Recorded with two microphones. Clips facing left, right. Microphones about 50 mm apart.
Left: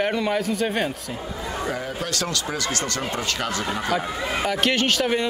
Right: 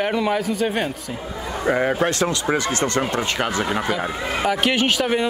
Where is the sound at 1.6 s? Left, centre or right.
Right.